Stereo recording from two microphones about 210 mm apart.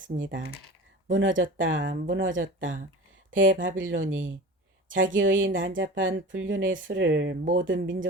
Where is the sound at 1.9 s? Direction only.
40° right (ahead or behind).